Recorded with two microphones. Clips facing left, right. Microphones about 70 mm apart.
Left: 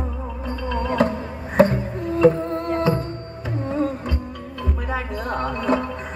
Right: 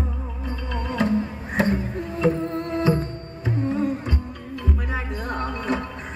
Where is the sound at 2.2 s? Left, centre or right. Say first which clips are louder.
Left 5 dB; left.